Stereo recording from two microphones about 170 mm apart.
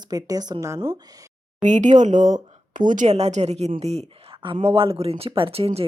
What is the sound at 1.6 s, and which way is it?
A woman's voice, 45° right (ahead or behind).